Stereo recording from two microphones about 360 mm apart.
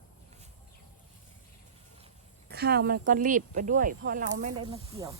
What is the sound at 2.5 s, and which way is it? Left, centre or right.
Speech, right.